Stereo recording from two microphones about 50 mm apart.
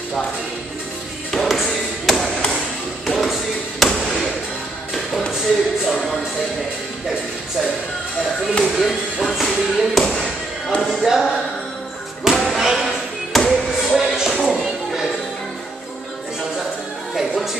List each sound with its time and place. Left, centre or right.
1.3 s tap: centre
3.1 s a sound: centre
5.3 s a sound: centre
8.6 s speech: centre
10.0 s thump: centre
10.8 s speech: centre
12.3 s basketball bounce: centre
13.5 s music: centre
17.1 s music: centre